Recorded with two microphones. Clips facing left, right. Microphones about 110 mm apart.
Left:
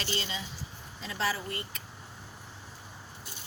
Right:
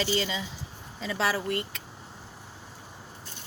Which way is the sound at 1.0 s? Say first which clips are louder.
Right 5 dB; 90° right.